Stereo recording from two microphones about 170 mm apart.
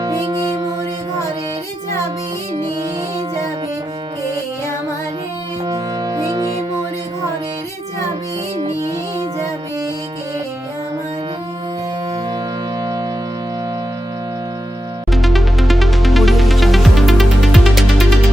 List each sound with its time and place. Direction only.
0.0 s music: 25° right (ahead or behind)
5.6 s music: 20° right (ahead or behind)
12.8 s music: 25° right (ahead or behind)
15.1 s music: centre (ahead or behind)